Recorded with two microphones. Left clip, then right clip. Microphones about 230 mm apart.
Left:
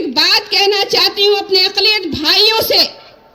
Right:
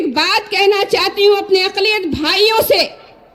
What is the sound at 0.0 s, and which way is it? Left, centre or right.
A woman's voice, right.